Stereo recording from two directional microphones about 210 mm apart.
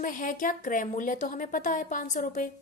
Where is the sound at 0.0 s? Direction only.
40° left (ahead or behind).